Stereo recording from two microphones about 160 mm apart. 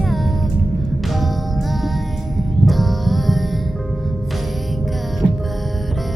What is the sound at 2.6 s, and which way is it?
Music, centre (ahead or behind).